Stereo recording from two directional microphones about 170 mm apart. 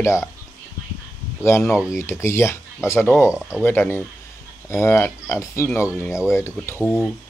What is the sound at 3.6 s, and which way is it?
Speech, 15° left (ahead or behind).